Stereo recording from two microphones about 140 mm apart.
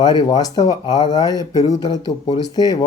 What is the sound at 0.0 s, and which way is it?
Speech, 30° left (ahead or behind).